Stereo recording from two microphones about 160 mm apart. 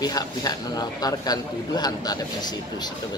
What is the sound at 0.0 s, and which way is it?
A man's voice, 25° left (ahead or behind).